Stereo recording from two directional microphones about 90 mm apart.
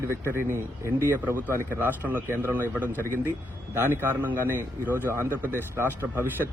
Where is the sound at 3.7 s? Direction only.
25° right (ahead or behind).